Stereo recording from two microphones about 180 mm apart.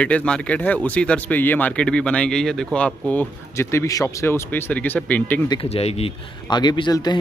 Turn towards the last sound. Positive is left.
turn(degrees=20)  # may be behind; listen again after turning